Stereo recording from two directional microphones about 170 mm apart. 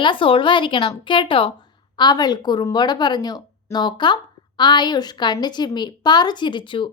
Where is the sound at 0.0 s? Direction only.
30° left (ahead or behind).